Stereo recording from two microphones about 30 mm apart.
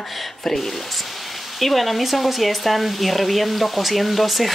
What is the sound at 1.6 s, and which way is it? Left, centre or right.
Speech, centre.